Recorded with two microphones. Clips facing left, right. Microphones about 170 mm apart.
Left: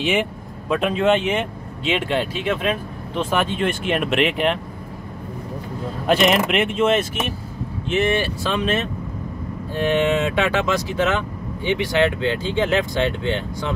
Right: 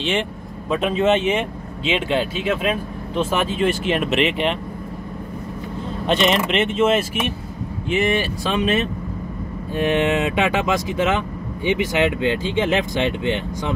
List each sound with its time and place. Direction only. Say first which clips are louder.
0.0 s speech: left 2 dB; 10° left (ahead or behind)
6.0 s speech: left 1 dB; 5° left (ahead or behind)
7.9 s speech: even; 15° right (ahead or behind)